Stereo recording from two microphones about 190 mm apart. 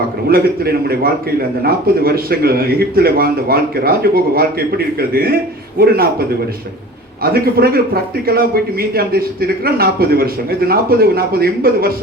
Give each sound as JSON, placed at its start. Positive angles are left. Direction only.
{"t": 0.3, "sound": "a man's voice", "side_deg": -50}